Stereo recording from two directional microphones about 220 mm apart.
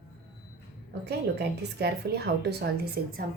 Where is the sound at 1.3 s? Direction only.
45° right (ahead or behind).